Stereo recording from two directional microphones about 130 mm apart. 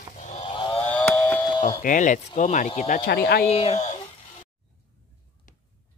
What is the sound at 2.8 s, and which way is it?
Speech, 90° left.